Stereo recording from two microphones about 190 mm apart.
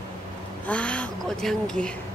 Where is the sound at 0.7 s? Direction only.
5° left (ahead or behind).